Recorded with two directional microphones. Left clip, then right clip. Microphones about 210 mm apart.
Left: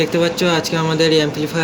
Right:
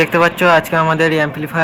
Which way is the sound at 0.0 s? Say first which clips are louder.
Right 5 dB; 10° left (ahead or behind).